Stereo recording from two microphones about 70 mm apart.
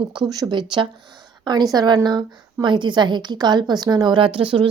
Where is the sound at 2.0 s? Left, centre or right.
Right.